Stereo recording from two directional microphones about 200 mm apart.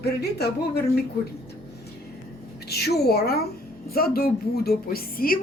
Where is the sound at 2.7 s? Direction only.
55° left (ahead or behind).